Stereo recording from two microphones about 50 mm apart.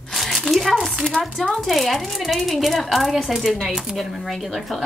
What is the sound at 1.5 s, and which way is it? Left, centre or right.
Speech, centre.